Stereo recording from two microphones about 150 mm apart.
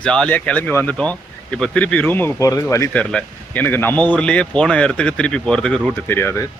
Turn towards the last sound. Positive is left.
turn(degrees=15)  # may be behind; listen again after turning